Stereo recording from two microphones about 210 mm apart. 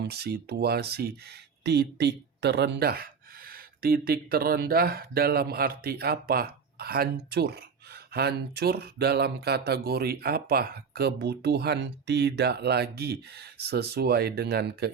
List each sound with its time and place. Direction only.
0.1 s speech: 50° right (ahead or behind)